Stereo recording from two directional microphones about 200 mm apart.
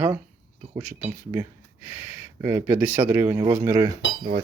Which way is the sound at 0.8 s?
10° right (ahead or behind).